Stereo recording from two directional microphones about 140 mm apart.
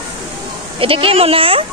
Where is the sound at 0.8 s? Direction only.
40° right (ahead or behind).